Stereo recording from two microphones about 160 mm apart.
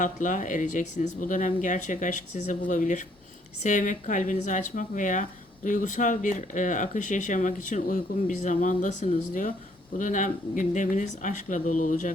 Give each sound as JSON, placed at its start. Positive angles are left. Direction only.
{"t": 0.0, "sound": "speech", "side_deg": 55}